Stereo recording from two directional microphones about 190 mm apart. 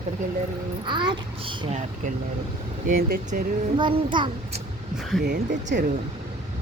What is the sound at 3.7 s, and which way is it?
Child singing, 25° right (ahead or behind).